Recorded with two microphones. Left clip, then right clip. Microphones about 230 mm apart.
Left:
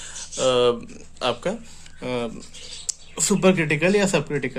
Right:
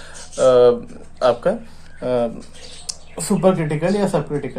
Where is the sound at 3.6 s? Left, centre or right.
Left.